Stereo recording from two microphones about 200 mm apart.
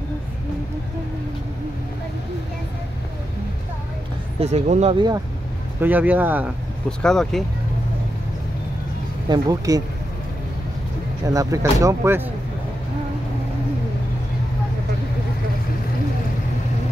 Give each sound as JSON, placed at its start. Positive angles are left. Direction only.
{"t": 4.4, "sound": "speech", "side_deg": -30}
{"t": 5.8, "sound": "speech", "side_deg": -10}
{"t": 7.0, "sound": "speech", "side_deg": 5}
{"t": 9.3, "sound": "speech", "side_deg": -20}
{"t": 11.3, "sound": "speech", "side_deg": -15}